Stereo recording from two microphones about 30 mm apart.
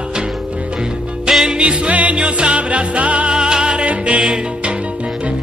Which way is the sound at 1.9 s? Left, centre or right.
Right.